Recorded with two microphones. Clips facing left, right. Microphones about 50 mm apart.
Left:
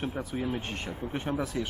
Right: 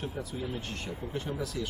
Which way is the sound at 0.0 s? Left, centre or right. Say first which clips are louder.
Left 4 dB; left.